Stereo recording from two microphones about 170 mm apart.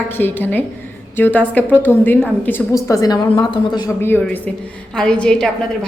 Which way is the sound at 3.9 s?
15° left (ahead or behind).